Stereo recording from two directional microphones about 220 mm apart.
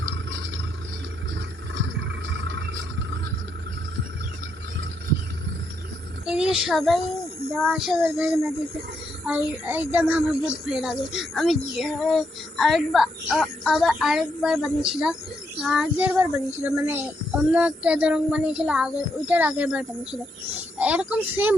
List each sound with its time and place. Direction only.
1.7 s vehicle: 55° right (ahead or behind)
6.2 s a child's voice: 5° right (ahead or behind)